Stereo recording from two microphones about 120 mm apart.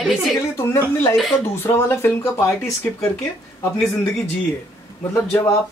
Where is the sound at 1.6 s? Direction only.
20° left (ahead or behind).